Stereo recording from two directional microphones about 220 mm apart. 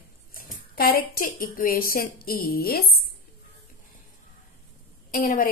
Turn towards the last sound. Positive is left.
turn(degrees=40)  # may be behind; listen again after turning